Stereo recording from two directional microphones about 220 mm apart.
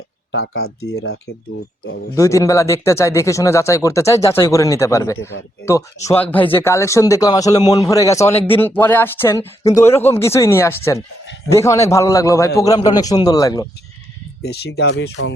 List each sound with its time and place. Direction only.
0.3 s speech: 55° left (ahead or behind)
2.1 s speech: 15° left (ahead or behind)
14.4 s speech: 50° left (ahead or behind)